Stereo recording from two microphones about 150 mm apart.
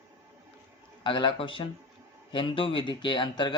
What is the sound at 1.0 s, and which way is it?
A man's voice, 35° left (ahead or behind).